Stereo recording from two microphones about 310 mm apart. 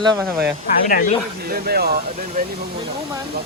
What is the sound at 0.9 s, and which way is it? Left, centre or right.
Speech, left.